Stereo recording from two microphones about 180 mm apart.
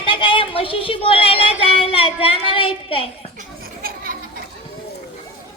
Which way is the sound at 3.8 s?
55° right (ahead or behind).